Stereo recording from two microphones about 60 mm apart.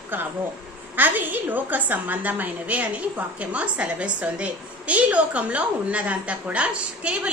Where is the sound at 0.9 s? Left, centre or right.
Right.